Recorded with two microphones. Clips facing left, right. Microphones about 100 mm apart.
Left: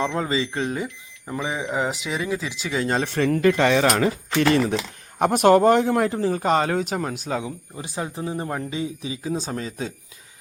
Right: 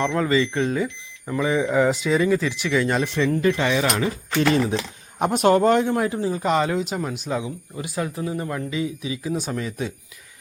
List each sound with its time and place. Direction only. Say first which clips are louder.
0.2 s speech: right 4 dB; 20° left (ahead or behind)
3.0 s speech: left 1 dB; 50° left (ahead or behind)
5.5 s speech: left 1 dB; 40° left (ahead or behind)
6.0 s speech: left 1 dB; 60° left (ahead or behind); by 7.5 s 45° left (ahead or behind)
7.8 s speech: right 3 dB; 25° left (ahead or behind)